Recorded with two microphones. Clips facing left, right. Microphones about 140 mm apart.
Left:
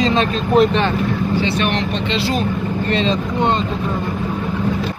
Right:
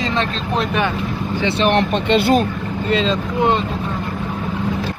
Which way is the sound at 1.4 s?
25° right (ahead or behind).